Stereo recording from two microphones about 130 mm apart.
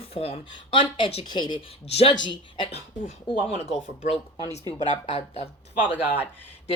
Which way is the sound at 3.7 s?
55° left (ahead or behind).